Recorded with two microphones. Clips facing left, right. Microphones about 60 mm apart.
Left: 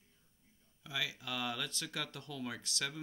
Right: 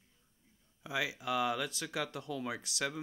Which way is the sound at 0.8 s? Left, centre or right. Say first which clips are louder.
Right 5 dB; centre.